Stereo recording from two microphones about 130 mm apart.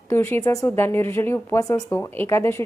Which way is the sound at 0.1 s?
20° left (ahead or behind).